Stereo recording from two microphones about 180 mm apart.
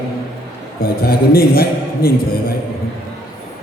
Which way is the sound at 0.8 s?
55° left (ahead or behind).